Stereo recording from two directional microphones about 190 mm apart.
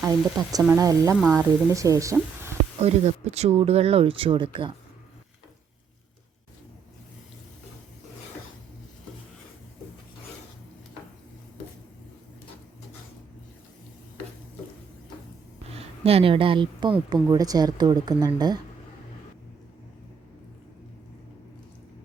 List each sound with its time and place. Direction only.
0.0 s a woman's voice: 20° right (ahead or behind)
2.8 s speech: 35° right (ahead or behind)
15.7 s a woman's voice: 30° right (ahead or behind)